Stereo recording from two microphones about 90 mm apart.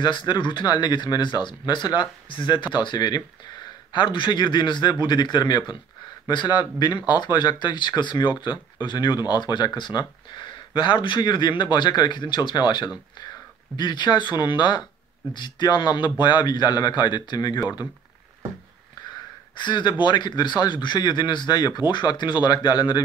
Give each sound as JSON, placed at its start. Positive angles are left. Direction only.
{"t": 0.0, "sound": "a man's voice", "side_deg": 55}
{"t": 19.5, "sound": "a man's voice", "side_deg": 55}